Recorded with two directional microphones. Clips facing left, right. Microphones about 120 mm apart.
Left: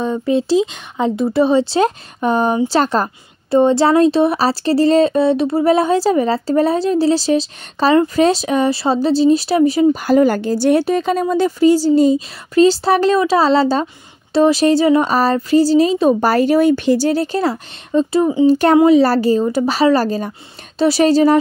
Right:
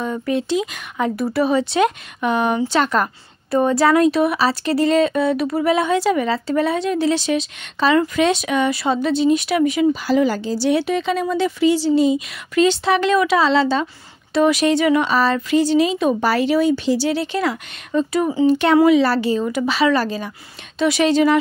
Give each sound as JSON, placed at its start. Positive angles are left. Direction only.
{"t": 0.0, "sound": "speech", "side_deg": 30}
{"t": 9.9, "sound": "speech", "side_deg": 50}
{"t": 18.5, "sound": "speech", "side_deg": 40}